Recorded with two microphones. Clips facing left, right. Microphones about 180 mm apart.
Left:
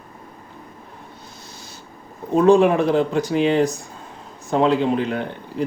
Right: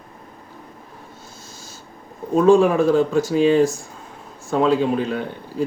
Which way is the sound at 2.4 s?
20° left (ahead or behind).